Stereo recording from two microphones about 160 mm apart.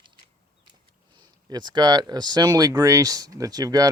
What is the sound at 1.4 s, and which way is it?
Speech, 25° right (ahead or behind).